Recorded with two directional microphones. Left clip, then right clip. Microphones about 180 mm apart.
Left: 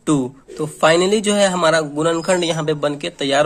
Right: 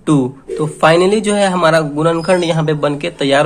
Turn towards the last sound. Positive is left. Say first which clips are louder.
# right 4 dB
turn(degrees=25)  # may be behind; listen again after turning